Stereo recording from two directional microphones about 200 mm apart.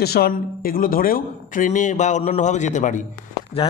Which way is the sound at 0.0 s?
50° left (ahead or behind).